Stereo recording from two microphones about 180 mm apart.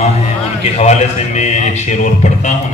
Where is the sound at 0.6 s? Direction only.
35° left (ahead or behind).